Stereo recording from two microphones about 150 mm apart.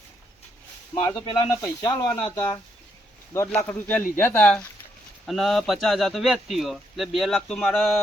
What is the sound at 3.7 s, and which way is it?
Speech, 10° left (ahead or behind).